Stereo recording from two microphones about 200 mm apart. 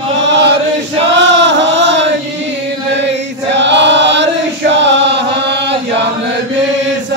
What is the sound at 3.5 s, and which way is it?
Chant, 60° right (ahead or behind).